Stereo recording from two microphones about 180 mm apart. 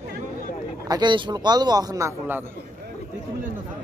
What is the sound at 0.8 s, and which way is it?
A man's voice, 25° right (ahead or behind).